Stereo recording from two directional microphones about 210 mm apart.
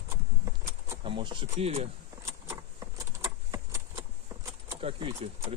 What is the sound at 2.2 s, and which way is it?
Keys jangling, 15° right (ahead or behind).